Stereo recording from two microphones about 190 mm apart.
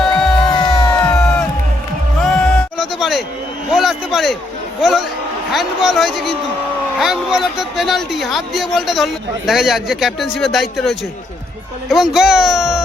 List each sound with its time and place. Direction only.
0.0 s music: 5° left (ahead or behind)
0.5 s music: 20° left (ahead or behind)
2.2 s music: 5° left (ahead or behind)
3.7 s a sound: centre (ahead or behind)
5.5 s speech: centre (ahead or behind)